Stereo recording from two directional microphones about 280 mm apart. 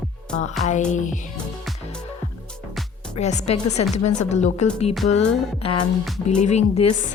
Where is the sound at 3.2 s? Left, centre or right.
Left.